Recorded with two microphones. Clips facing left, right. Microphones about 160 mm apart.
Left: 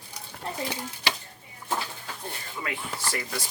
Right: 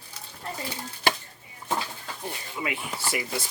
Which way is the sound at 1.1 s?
50° right (ahead or behind).